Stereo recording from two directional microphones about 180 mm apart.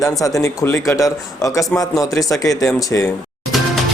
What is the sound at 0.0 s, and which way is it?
A man's voice, 20° left (ahead or behind).